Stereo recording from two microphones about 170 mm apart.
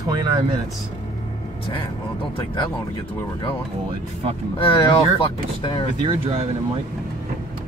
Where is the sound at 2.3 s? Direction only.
25° left (ahead or behind).